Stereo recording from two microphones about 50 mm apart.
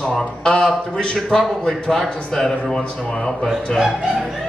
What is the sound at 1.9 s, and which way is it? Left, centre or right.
A man's voice, centre.